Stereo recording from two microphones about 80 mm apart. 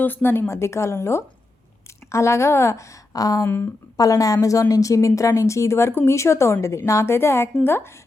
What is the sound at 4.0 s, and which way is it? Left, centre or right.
A woman's voice, left.